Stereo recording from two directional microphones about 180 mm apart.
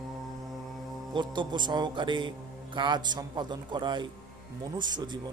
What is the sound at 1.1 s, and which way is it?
Speech, 25° right (ahead or behind).